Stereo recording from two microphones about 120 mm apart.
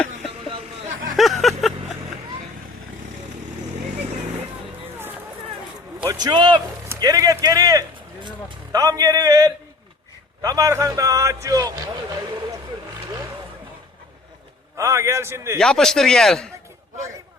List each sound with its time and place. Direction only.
1.1 s a sound: centre (ahead or behind)
6.1 s a man's voice: 35° right (ahead or behind)
6.8 s a sound: 25° right (ahead or behind)
8.7 s a man's voice: 30° right (ahead or behind)
13.1 s vehicle: 30° right (ahead or behind)
14.8 s speech: 25° right (ahead or behind)
15.5 s speech: 5° left (ahead or behind)